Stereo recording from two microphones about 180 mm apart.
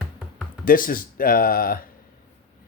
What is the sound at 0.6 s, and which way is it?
Speech, 50° left (ahead or behind).